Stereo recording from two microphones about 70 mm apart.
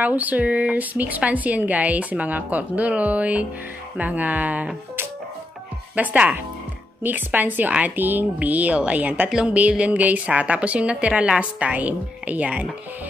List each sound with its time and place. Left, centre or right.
0.0 s speech: right
5.9 s speech: right